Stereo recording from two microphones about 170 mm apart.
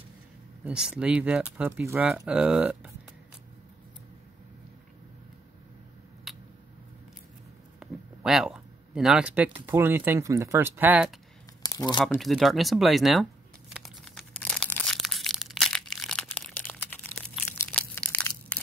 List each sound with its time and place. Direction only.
0.7 s speech: 5° right (ahead or behind)
6.3 s a sound: centre (ahead or behind)
7.8 s a sound: 5° right (ahead or behind)
9.7 s speech: 10° right (ahead or behind)
11.6 s crumpling: 25° left (ahead or behind)
12.0 s speech: centre (ahead or behind)
13.7 s crumpling: centre (ahead or behind)